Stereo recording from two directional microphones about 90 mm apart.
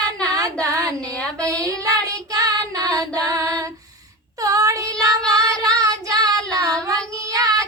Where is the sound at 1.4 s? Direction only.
40° right (ahead or behind).